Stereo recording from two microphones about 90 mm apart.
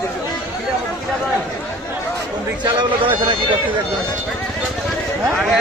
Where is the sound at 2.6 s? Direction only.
65° right (ahead or behind).